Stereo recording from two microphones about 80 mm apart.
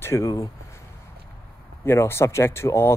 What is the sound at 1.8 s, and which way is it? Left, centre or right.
Speech, left.